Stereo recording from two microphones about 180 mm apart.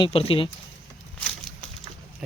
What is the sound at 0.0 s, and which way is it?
Speech, 30° left (ahead or behind).